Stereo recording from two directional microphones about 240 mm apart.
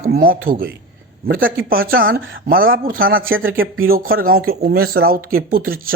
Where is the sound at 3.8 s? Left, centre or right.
Right.